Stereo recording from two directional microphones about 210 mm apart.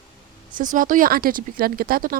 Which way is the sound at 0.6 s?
40° right (ahead or behind).